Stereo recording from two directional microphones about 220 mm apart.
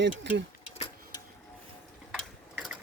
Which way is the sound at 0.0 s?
55° right (ahead or behind).